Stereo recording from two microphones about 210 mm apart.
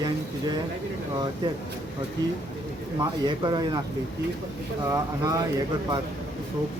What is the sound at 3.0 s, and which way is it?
Speech, 20° right (ahead or behind).